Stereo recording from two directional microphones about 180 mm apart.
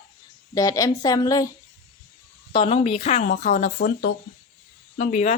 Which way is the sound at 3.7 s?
75° left (ahead or behind).